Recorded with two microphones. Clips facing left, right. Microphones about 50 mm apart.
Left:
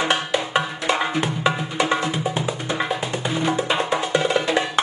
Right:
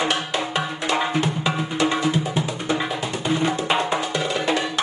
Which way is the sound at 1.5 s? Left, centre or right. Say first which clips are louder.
Left 1 dB; centre.